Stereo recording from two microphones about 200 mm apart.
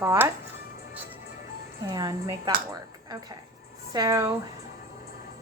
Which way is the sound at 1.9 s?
15° right (ahead or behind).